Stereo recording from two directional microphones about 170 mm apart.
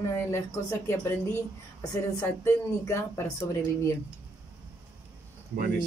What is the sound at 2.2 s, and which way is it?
Speech, 15° left (ahead or behind).